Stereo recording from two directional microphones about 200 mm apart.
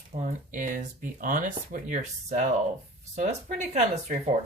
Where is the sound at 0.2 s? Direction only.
40° right (ahead or behind).